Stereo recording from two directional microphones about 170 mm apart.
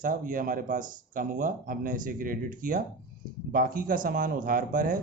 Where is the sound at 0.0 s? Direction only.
55° right (ahead or behind).